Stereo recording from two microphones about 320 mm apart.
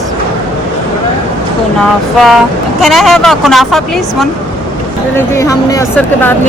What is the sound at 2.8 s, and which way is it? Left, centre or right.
A woman's voice, centre.